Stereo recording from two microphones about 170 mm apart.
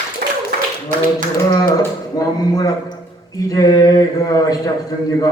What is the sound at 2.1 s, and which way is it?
Speech, 20° left (ahead or behind).